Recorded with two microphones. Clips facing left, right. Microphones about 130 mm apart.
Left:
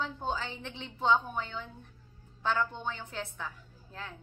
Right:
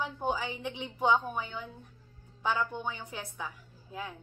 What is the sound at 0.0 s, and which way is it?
A woman's voice, 15° right (ahead or behind).